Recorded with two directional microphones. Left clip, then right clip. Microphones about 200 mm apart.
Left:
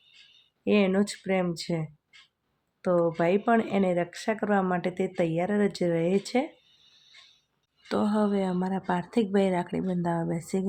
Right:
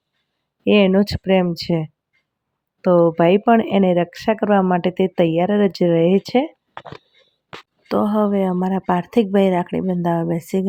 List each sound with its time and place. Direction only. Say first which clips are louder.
0.6 s speech: right 10 dB; 40° right (ahead or behind)
7.9 s speech: right 9 dB; 35° right (ahead or behind)